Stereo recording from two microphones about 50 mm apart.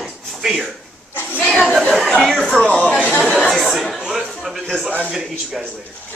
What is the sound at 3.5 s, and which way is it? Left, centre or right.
Chatter, centre.